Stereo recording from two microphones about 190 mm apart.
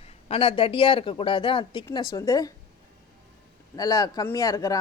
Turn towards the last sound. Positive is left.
turn(degrees=15)  # may be behind; listen again after turning